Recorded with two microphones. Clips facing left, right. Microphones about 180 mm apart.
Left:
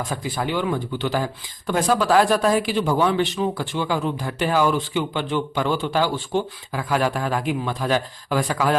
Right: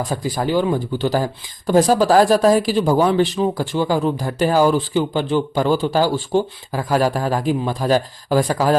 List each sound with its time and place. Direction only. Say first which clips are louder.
0.1 s speech: right 7 dB; 40° right (ahead or behind)